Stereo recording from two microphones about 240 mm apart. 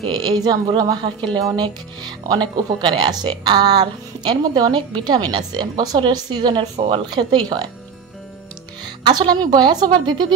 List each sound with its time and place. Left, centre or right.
0.0 s speech: centre
8.8 s speech: centre